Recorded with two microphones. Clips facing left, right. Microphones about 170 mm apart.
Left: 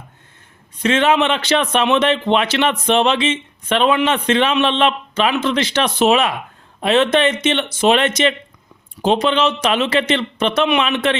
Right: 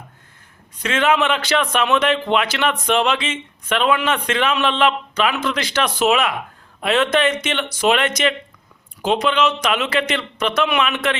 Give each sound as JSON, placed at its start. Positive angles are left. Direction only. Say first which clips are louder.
{"t": 0.8, "sound": "a man's voice", "louder": "left 3 dB", "side_deg": 25}